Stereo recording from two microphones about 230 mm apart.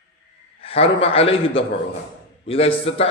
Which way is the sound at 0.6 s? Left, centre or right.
Left.